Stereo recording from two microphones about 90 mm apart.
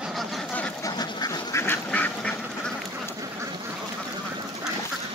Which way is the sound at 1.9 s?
15° left (ahead or behind).